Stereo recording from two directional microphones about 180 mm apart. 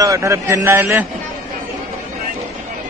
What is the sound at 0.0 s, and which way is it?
A man's voice, 15° right (ahead or behind).